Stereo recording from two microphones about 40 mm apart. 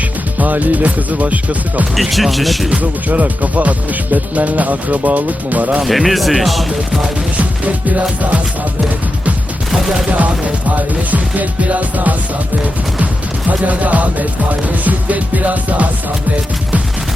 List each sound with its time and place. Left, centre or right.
0.3 s speech: right
2.0 s speech: centre
3.1 s speech: right
5.8 s speech: centre
7.3 s speech: right
10.2 s speech: right
13.5 s speech: right